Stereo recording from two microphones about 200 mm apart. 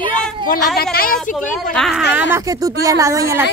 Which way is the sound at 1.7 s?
Centre (ahead or behind).